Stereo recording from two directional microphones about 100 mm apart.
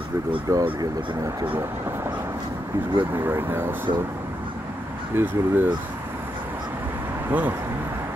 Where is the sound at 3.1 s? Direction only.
25° right (ahead or behind).